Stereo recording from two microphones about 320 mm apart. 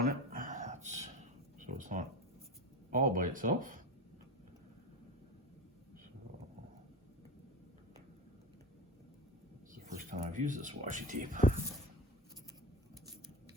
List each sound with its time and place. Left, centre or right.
0.0 s a sound: right
2.9 s speech: right
9.7 s speech: right